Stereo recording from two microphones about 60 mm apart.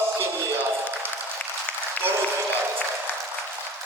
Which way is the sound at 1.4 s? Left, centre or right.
Left.